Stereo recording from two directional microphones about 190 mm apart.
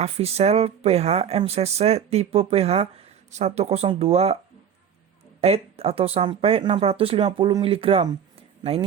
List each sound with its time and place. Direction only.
0.0 s speech: 35° right (ahead or behind)
5.4 s speech: 30° right (ahead or behind)